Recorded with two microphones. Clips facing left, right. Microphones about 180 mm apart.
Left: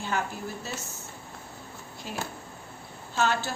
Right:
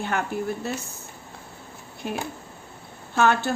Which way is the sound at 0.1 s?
60° right (ahead or behind).